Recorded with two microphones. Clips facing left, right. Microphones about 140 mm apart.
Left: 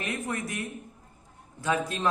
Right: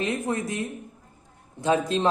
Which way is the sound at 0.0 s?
25° right (ahead or behind).